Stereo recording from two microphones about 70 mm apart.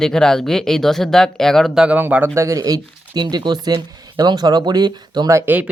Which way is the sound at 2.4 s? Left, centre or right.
Right.